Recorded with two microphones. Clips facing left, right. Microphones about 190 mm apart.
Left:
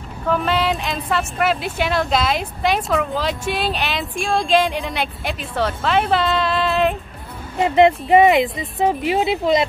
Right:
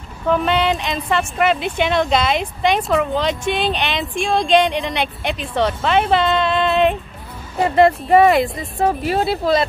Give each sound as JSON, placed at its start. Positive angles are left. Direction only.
{"t": 0.3, "sound": "speech", "side_deg": 0}
{"t": 7.7, "sound": "speech", "side_deg": 20}